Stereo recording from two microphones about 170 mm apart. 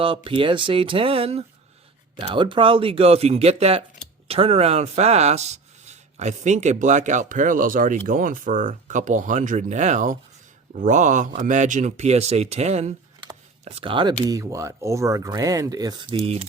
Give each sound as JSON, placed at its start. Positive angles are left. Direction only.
{"t": 0.0, "sound": "speech", "side_deg": -30}